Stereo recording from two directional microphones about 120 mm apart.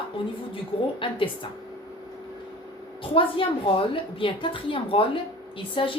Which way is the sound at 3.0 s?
45° left (ahead or behind).